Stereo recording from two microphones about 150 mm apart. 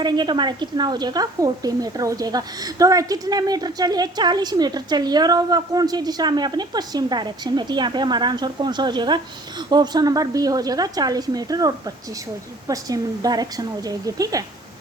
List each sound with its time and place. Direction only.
0.0 s a woman's voice: 30° right (ahead or behind)